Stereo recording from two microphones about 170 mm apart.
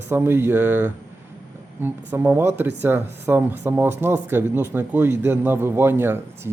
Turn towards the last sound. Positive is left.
turn(degrees=-15)  # may be behind; listen again after turning